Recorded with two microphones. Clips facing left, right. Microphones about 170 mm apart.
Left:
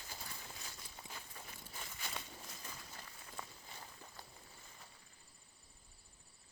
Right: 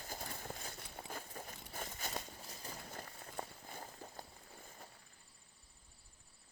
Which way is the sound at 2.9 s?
45° right (ahead or behind).